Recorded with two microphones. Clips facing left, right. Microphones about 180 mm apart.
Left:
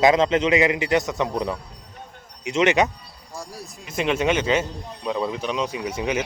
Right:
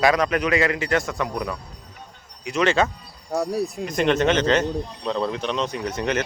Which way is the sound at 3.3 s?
65° right (ahead or behind).